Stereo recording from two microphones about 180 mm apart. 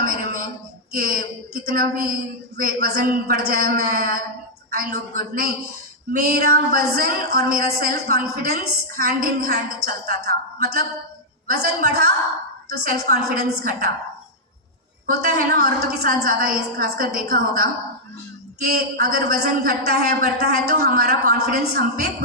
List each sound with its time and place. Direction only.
0.0 s a sound: 50° right (ahead or behind)
0.9 s a woman's voice: 55° right (ahead or behind)
15.0 s a woman's voice: 55° right (ahead or behind)
18.7 s a woman's voice: 60° right (ahead or behind)